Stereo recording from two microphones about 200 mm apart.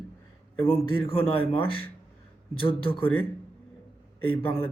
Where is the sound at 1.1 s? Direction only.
30° left (ahead or behind).